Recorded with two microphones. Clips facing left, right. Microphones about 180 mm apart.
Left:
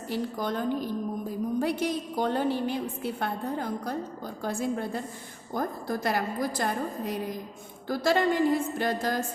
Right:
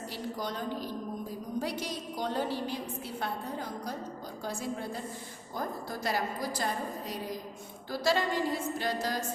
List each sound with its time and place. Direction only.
0.1 s a woman's voice: 55° left (ahead or behind)